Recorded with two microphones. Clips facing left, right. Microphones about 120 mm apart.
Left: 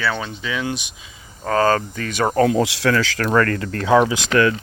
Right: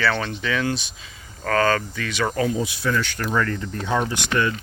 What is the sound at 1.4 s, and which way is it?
Speech, 30° left (ahead or behind).